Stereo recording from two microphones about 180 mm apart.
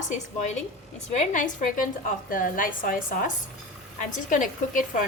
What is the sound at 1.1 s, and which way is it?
A woman's voice, 40° left (ahead or behind).